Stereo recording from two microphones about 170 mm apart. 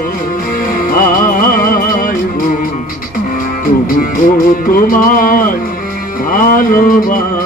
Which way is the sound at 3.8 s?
55° left (ahead or behind).